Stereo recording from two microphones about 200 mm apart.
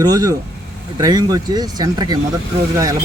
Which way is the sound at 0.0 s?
20° right (ahead or behind).